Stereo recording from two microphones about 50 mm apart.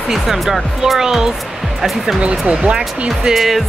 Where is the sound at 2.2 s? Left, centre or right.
Right.